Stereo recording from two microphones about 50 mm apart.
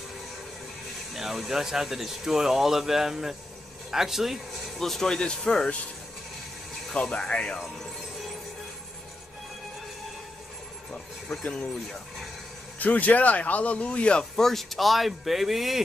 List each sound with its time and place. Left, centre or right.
1.1 s speech: centre
4.7 s speech: centre
6.9 s speech: centre
12.7 s speech: left
14.4 s speech: centre